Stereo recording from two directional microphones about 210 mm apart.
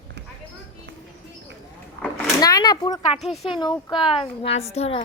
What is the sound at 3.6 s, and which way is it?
Speech, 20° left (ahead or behind).